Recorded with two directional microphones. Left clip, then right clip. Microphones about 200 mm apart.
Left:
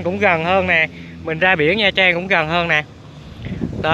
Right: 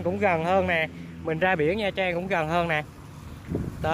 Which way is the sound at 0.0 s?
5° right (ahead or behind).